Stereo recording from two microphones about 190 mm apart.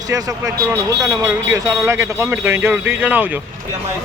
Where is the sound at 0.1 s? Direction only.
20° right (ahead or behind).